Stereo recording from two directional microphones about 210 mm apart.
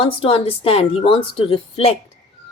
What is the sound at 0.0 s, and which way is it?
Speech, 25° left (ahead or behind).